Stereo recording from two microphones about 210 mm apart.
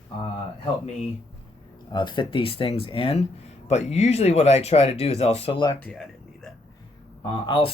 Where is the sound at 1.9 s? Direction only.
20° left (ahead or behind).